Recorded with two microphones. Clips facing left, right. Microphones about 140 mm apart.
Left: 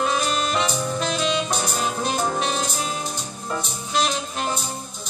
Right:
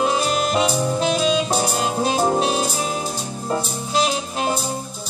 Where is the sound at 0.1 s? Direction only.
35° right (ahead or behind).